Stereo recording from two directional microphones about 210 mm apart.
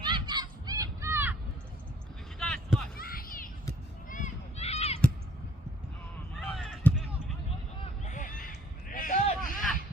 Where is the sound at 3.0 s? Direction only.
45° left (ahead or behind).